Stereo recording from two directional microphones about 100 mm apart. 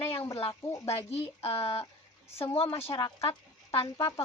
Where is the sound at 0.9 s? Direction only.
90° left.